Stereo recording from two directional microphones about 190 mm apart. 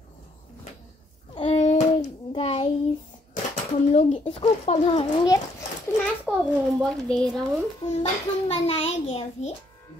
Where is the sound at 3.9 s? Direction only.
40° left (ahead or behind).